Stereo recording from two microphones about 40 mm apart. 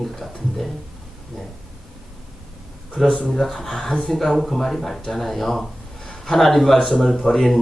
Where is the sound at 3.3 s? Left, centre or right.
Centre.